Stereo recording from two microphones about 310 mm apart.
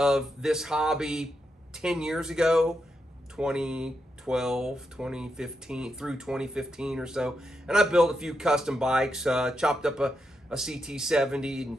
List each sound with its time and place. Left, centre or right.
0.0 s speech: centre